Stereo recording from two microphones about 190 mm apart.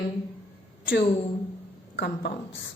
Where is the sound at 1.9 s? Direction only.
65° left (ahead or behind).